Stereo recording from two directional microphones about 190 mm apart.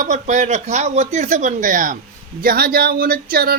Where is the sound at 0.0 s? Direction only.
40° right (ahead or behind).